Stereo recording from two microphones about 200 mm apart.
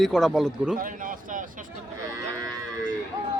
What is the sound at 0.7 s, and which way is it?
Speech, 45° right (ahead or behind).